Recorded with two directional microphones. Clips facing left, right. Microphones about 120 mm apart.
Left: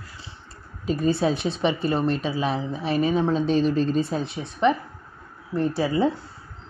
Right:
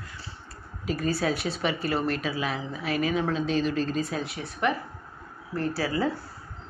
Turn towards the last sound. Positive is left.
turn(degrees=20)  # may be behind; listen again after turning